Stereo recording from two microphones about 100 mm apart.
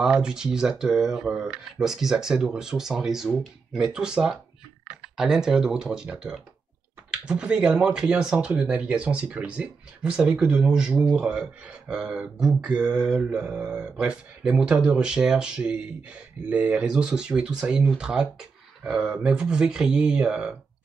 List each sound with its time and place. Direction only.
0.0 s speech: 5° right (ahead or behind)